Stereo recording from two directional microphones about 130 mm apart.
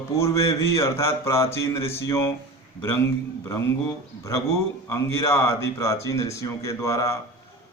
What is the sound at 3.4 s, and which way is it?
Speech, 20° left (ahead or behind).